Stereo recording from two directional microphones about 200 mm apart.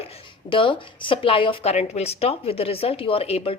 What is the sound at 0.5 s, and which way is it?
Speech, 25° left (ahead or behind).